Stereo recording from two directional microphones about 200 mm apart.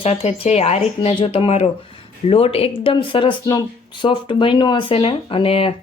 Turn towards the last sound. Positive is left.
turn(degrees=30)  # may be behind; listen again after turning